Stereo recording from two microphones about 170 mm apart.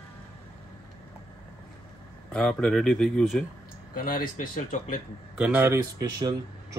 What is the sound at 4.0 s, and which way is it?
Speech, 55° left (ahead or behind).